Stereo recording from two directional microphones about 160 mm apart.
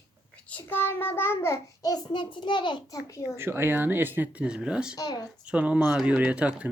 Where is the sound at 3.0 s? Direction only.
20° left (ahead or behind).